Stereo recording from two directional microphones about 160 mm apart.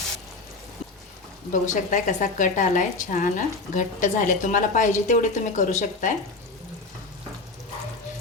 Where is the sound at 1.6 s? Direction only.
50° left (ahead or behind).